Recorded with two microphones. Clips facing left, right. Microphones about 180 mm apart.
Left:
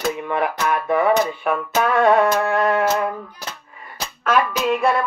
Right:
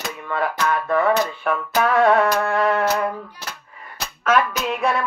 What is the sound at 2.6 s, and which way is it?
Speech, 5° left (ahead or behind).